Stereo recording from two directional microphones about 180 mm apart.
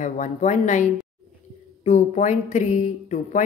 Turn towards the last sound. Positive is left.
turn(degrees=45)  # may be behind; listen again after turning